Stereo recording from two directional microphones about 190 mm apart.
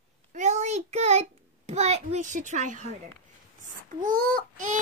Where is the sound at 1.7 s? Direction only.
35° right (ahead or behind).